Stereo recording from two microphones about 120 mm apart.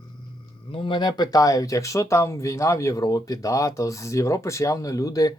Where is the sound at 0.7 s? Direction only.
45° left (ahead or behind).